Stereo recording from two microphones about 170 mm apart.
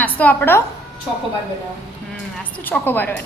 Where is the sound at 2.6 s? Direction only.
10° left (ahead or behind).